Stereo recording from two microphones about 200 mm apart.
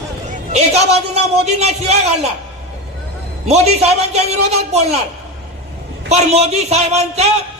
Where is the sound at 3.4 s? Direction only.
35° right (ahead or behind).